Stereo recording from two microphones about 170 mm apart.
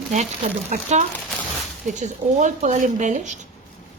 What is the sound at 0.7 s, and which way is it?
Speech, 45° right (ahead or behind).